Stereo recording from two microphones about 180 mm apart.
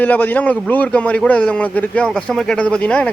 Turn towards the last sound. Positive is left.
turn(degrees=5)  # may be behind; listen again after turning